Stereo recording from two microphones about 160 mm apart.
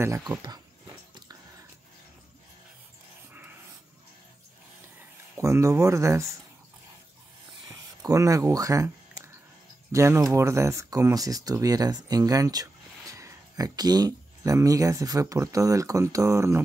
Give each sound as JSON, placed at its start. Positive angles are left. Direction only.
{"t": 0.0, "sound": "speech", "side_deg": -15}
{"t": 5.3, "sound": "speech", "side_deg": -20}
{"t": 7.6, "sound": "a sound", "side_deg": -20}
{"t": 9.9, "sound": "speech", "side_deg": -20}